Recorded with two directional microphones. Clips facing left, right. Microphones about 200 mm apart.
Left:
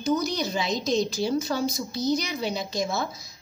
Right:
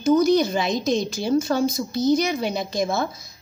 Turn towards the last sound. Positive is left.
turn(degrees=-55)  # may be behind; listen again after turning